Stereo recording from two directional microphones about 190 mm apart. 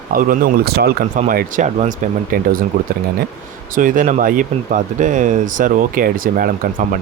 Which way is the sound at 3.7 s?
45° right (ahead or behind).